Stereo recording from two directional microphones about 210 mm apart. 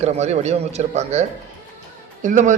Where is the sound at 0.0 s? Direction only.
30° right (ahead or behind).